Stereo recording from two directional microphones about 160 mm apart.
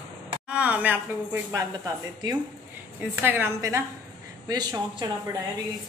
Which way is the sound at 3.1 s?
15° right (ahead or behind).